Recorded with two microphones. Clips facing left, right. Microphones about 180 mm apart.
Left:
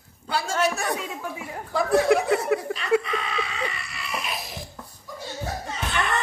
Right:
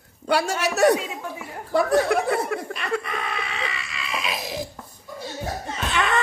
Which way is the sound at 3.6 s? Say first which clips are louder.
Even; 90° right.